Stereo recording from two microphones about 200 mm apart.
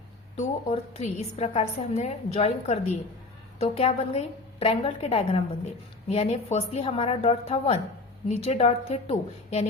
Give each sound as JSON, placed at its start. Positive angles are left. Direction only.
{"t": 0.3, "sound": "a woman's voice", "side_deg": 35}